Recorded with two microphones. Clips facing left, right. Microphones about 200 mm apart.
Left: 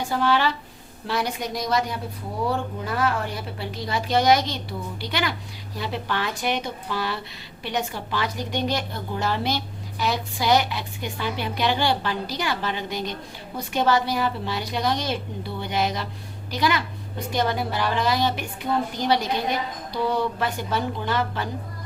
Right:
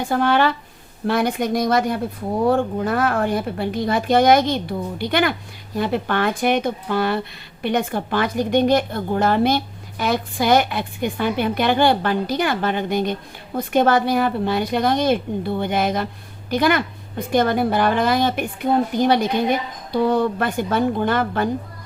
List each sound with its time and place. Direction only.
0.0 s a woman's voice: 55° right (ahead or behind)